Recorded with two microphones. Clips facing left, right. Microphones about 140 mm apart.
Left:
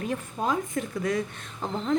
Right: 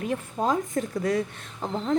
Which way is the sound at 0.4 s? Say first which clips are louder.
Right 2 dB; 40° right (ahead or behind).